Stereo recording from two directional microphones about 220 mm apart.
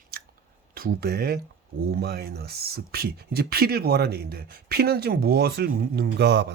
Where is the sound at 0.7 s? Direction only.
40° right (ahead or behind).